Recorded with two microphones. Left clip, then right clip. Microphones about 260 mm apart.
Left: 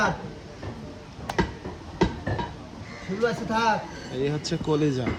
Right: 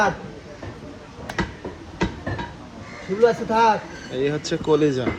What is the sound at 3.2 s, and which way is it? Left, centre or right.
Speech, right.